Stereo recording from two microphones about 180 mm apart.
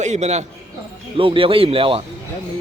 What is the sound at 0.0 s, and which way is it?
A man's voice, 40° right (ahead or behind).